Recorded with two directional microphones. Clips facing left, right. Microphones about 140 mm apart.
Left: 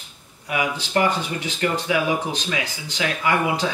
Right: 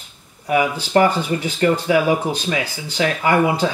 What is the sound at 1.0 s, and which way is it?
Speech, 40° right (ahead or behind).